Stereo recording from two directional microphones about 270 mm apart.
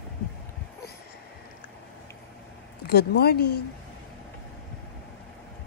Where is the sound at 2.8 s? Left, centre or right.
Left.